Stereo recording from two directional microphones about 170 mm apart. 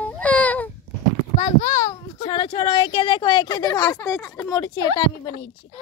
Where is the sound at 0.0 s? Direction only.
10° left (ahead or behind).